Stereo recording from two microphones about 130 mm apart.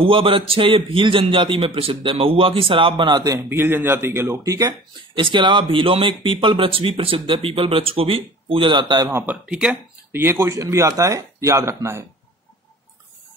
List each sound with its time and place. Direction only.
0.0 s speech: 45° right (ahead or behind)
3.4 s speech: 15° right (ahead or behind)
5.2 s speech: 40° right (ahead or behind)
9.1 s speech: 10° right (ahead or behind)
10.1 s speech: 15° right (ahead or behind)